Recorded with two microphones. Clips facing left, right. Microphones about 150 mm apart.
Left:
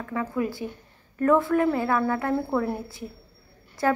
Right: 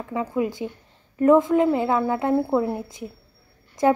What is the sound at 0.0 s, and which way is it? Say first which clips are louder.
A woman's voice: right 3 dB; 20° right (ahead or behind).